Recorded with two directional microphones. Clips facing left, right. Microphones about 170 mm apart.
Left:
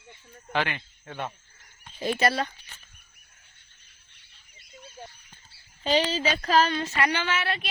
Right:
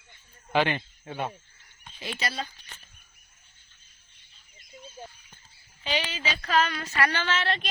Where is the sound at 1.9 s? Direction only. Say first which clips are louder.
Left 9 dB; 45° left (ahead or behind); by 2.5 s 65° left (ahead or behind).